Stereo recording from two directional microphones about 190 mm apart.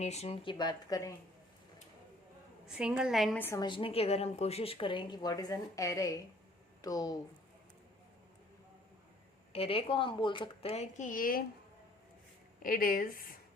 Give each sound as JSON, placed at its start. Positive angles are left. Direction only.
{"t": 0.0, "sound": "speech", "side_deg": 35}
{"t": 0.5, "sound": "a woman's voice", "side_deg": 20}
{"t": 2.6, "sound": "a woman's voice", "side_deg": -5}
{"t": 3.4, "sound": "a woman's voice", "side_deg": 15}
{"t": 3.7, "sound": "a woman's voice", "side_deg": 30}
{"t": 9.5, "sound": "speech", "side_deg": 30}
{"t": 12.6, "sound": "speech", "side_deg": 50}